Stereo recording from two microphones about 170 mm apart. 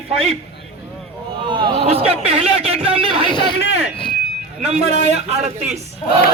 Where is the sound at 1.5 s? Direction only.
30° right (ahead or behind).